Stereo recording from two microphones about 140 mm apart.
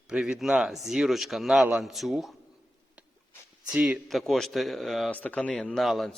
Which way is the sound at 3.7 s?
5° right (ahead or behind).